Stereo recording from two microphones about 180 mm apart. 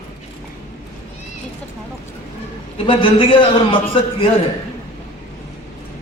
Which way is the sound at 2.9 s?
30° left (ahead or behind).